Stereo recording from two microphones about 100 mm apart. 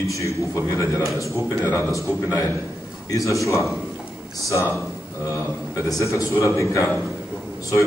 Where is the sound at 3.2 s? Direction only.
30° left (ahead or behind).